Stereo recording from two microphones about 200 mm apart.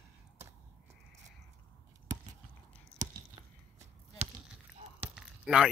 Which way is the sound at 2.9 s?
20° right (ahead or behind).